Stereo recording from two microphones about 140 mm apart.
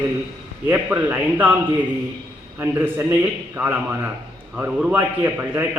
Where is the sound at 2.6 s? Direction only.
15° right (ahead or behind).